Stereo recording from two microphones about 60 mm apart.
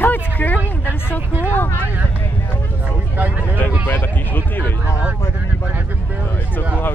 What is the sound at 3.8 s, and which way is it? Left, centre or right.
Speech, left.